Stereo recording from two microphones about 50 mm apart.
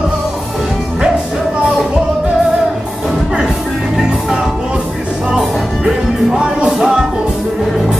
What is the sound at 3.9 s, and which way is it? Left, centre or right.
Music, centre.